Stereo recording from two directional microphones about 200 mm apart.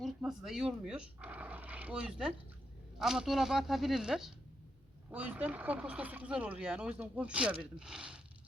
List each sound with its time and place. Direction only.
0.0 s speech: centre (ahead or behind)